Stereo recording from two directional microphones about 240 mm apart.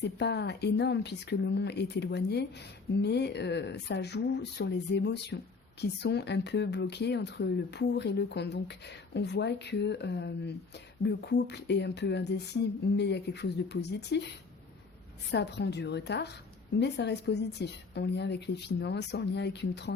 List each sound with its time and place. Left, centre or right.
0.0 s a woman's voice: left
15.3 s a woman's voice: left